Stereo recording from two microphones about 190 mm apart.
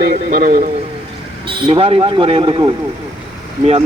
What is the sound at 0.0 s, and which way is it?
Speech, 50° right (ahead or behind).